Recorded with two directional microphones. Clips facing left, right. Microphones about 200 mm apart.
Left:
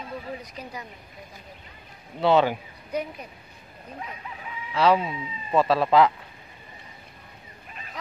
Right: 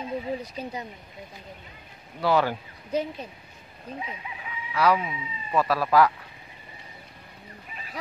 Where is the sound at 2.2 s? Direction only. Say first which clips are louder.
Left 3 dB; 20° left (ahead or behind).